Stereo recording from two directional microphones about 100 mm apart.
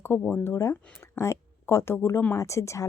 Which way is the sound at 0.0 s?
25° left (ahead or behind).